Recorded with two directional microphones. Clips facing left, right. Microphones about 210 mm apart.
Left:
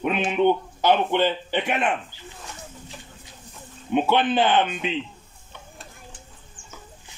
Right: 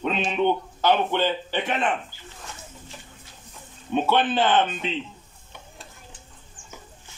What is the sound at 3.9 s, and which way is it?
Speech, 15° left (ahead or behind).